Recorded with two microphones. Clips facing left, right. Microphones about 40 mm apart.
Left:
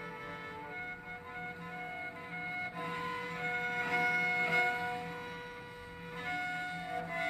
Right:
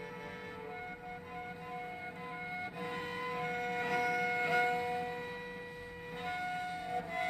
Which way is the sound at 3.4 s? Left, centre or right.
Left.